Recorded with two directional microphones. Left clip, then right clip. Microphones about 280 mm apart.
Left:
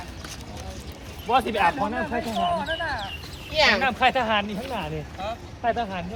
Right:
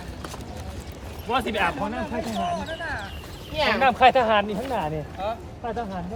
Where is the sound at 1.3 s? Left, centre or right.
Centre.